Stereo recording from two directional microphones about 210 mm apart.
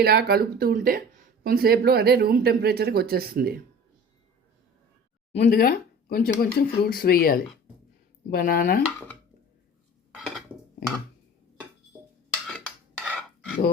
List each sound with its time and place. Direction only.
0.0 s speech: 45° right (ahead or behind)
5.4 s speech: 45° left (ahead or behind)
10.2 s dishes: centre (ahead or behind)
12.3 s dishes: 5° left (ahead or behind)
13.1 s cutlery: centre (ahead or behind)